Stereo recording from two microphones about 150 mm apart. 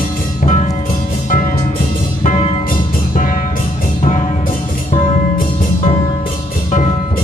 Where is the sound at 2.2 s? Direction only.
50° left (ahead or behind).